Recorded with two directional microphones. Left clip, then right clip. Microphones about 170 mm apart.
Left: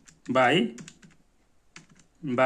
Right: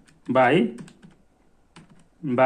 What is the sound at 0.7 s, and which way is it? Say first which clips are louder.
Typing: right 3 dB; 40° left (ahead or behind).